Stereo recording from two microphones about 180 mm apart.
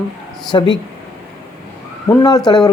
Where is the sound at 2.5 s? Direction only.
20° left (ahead or behind).